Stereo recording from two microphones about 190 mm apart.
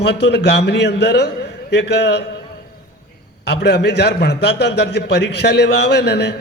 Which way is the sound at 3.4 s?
60° left (ahead or behind).